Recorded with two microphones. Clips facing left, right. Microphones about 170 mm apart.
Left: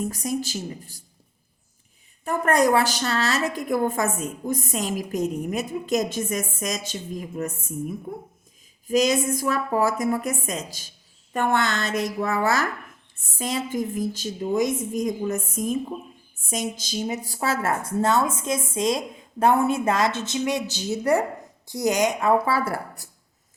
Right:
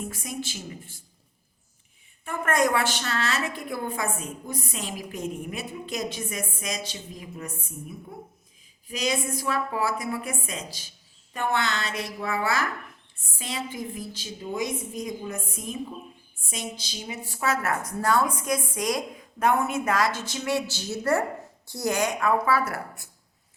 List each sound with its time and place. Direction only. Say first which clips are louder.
0.0 s speech: left 7 dB; 40° left (ahead or behind)
2.2 s a woman's voice: left 4 dB; 40° left (ahead or behind)